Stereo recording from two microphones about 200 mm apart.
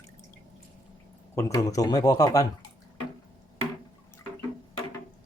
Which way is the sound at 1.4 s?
15° left (ahead or behind).